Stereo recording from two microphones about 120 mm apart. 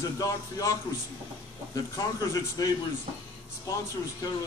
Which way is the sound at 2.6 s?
35° left (ahead or behind).